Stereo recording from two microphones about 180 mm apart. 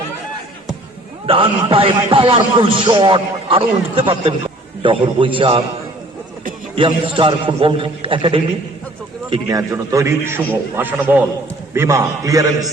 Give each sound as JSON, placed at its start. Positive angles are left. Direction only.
{"t": 1.3, "sound": "a man's voice", "side_deg": -30}
{"t": 6.7, "sound": "a man's voice", "side_deg": -25}
{"t": 9.3, "sound": "a man's voice", "side_deg": -20}